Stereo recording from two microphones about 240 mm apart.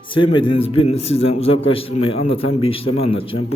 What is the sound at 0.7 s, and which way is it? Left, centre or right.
A man's voice, left.